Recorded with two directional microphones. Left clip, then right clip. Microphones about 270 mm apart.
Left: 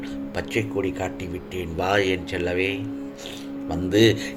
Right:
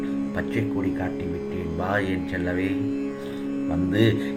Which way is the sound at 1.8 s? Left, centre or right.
Left.